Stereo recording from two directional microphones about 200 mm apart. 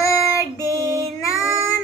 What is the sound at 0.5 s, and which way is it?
Female singing, 15° right (ahead or behind).